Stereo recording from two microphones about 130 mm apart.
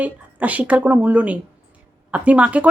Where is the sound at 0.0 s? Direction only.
10° right (ahead or behind).